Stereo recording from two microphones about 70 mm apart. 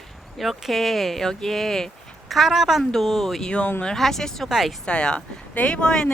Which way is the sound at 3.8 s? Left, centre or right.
Centre.